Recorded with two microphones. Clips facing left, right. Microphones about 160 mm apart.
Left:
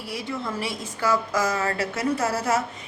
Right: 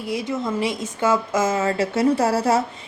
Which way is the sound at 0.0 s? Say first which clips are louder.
Right 6 dB; 20° right (ahead or behind).